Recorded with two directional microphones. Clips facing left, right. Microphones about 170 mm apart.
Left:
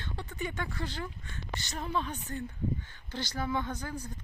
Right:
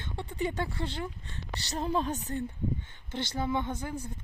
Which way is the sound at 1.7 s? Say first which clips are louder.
Right 5 dB; 40° right (ahead or behind).